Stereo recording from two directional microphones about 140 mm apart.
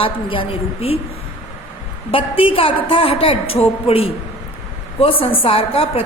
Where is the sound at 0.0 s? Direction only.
40° left (ahead or behind).